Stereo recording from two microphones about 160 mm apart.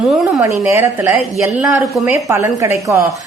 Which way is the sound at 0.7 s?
20° right (ahead or behind).